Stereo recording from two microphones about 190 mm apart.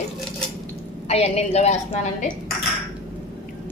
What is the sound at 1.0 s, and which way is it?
A woman's voice, 35° left (ahead or behind).